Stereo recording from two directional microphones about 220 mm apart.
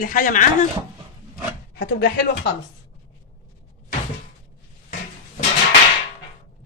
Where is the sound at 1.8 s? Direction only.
45° left (ahead or behind).